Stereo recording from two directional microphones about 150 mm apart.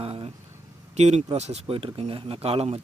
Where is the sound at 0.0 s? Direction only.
40° right (ahead or behind).